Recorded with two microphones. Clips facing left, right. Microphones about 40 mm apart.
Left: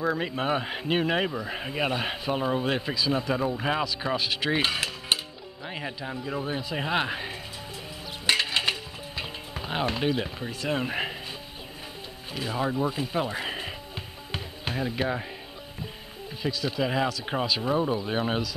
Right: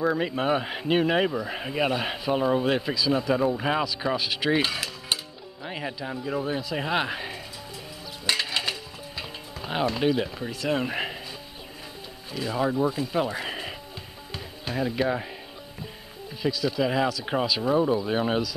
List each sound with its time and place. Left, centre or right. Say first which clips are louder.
0.0 s speech: right 2 dB; centre
4.6 s music: even; centre
5.7 s speech: right 2 dB; centre
8.3 s music: left 2 dB; centre
9.9 s speech: right 3 dB; centre
12.3 s speech: right 2 dB; left
13.1 s a sound: right 2 dB; centre
14.8 s speech: right 3 dB; centre
16.4 s speech: right 3 dB; centre